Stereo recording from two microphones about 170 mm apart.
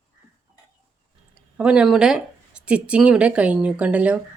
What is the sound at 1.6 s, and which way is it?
Speech, 5° right (ahead or behind).